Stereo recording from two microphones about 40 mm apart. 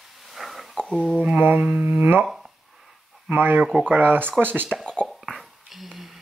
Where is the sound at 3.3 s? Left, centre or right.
Right.